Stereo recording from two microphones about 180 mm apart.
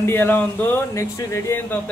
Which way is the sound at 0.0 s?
10° left (ahead or behind).